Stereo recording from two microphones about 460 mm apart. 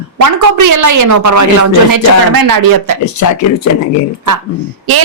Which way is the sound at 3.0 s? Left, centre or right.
Left.